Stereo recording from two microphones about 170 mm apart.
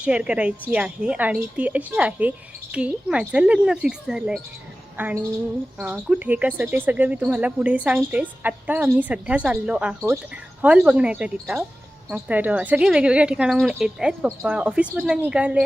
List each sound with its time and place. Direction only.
0.0 s speech: 5° right (ahead or behind)